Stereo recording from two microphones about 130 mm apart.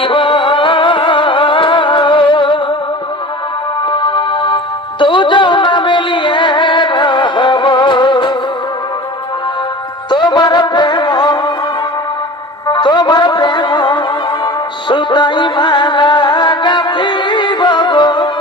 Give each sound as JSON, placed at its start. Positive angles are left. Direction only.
{"t": 0.0, "sound": "music", "side_deg": 40}
{"t": 3.9, "sound": "music", "side_deg": 40}
{"t": 10.1, "sound": "music", "side_deg": 35}
{"t": 12.6, "sound": "music", "side_deg": 35}